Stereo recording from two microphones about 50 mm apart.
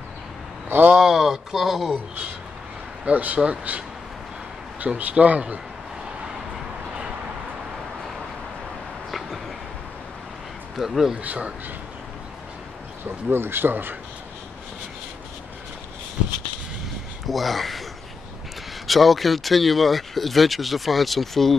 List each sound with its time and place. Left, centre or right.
0.7 s speech: right
0.9 s speech: centre
3.1 s speech: right
10.8 s speech: centre
11.2 s speech: right
13.0 s speech: right
17.3 s speech: centre
18.9 s speech: centre